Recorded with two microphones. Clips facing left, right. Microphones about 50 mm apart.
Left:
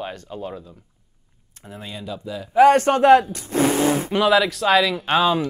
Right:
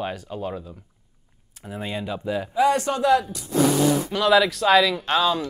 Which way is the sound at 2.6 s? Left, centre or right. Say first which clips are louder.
Left 7 dB; left.